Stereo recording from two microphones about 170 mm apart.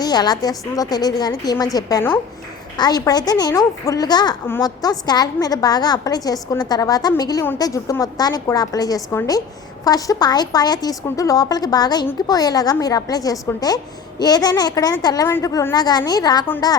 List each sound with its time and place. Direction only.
0.0 s a woman's voice: 25° left (ahead or behind)